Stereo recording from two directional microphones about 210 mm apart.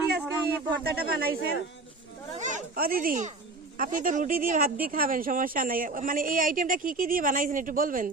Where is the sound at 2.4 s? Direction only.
35° right (ahead or behind).